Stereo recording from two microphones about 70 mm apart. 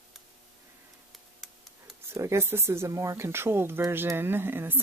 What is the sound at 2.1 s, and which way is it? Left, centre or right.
Speech, right.